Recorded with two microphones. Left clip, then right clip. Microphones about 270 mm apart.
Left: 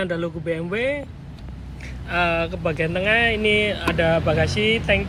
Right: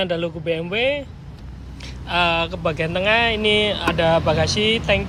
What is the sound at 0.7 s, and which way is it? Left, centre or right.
Speech, right.